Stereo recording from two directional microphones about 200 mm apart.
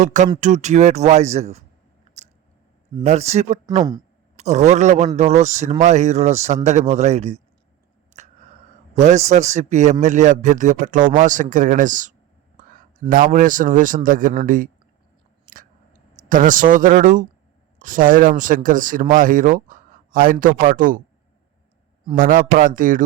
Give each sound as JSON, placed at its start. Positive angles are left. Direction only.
{"t": 0.0, "sound": "a man's voice", "side_deg": -40}
{"t": 3.0, "sound": "a man's voice", "side_deg": -35}
{"t": 3.8, "sound": "speech", "side_deg": -20}
{"t": 4.4, "sound": "a man's voice", "side_deg": -35}
{"t": 8.1, "sound": "a sound", "side_deg": -35}
{"t": 9.0, "sound": "a man's voice", "side_deg": -35}
{"t": 16.3, "sound": "a man's voice", "side_deg": -40}
{"t": 22.1, "sound": "a man's voice", "side_deg": -45}